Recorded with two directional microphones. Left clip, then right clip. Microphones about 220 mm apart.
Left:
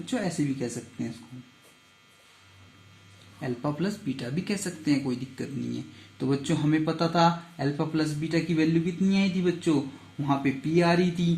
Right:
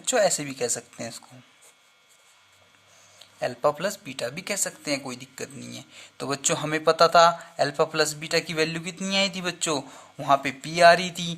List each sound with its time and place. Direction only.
0.0 s speech: 50° right (ahead or behind)
3.4 s speech: 50° right (ahead or behind)